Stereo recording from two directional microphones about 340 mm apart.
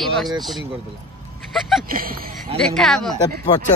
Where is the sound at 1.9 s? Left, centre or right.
Right.